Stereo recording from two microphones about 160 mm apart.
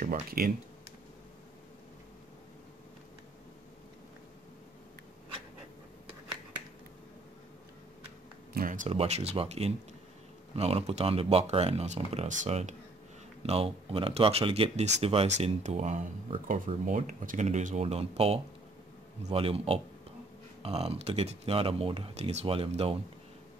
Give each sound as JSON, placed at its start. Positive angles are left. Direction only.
{"t": 0.0, "sound": "speech", "side_deg": -65}
{"t": 8.5, "sound": "a sound", "side_deg": -55}
{"t": 8.9, "sound": "speech", "side_deg": -40}